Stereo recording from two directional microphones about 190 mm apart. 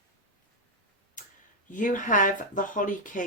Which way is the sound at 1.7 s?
40° left (ahead or behind).